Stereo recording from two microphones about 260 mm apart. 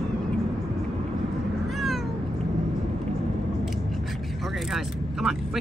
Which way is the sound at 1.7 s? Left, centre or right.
Centre.